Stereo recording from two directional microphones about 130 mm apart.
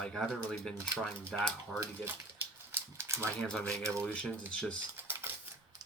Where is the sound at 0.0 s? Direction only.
5° left (ahead or behind).